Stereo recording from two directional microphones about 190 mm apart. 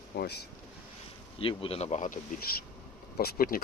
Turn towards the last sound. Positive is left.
turn(degrees=50)  # may be behind; listen again after turning